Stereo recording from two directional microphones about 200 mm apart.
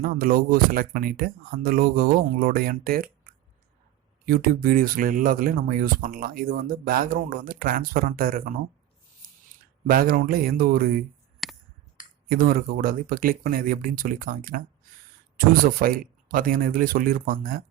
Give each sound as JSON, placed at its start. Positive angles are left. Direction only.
{"t": 0.0, "sound": "speech", "side_deg": -45}
{"t": 4.3, "sound": "speech", "side_deg": -45}
{"t": 9.8, "sound": "speech", "side_deg": -45}
{"t": 11.4, "sound": "a sound", "side_deg": 0}
{"t": 12.3, "sound": "speech", "side_deg": -45}